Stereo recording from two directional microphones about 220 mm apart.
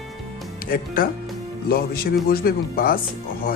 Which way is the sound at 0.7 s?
40° left (ahead or behind).